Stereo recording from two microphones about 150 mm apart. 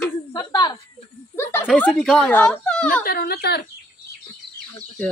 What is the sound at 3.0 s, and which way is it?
Speech, 85° left.